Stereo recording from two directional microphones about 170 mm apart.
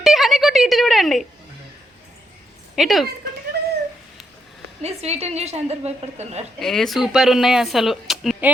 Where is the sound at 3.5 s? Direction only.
70° right (ahead or behind).